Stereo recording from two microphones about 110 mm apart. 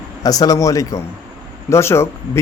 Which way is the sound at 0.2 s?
35° left (ahead or behind).